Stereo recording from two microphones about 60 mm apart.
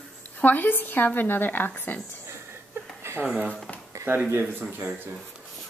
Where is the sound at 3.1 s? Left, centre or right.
Right.